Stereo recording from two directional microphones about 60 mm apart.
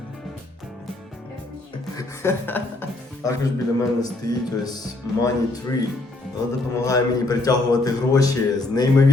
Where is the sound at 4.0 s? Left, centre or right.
Left.